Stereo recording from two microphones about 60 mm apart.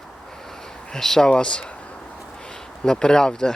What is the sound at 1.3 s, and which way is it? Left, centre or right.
Speech, centre.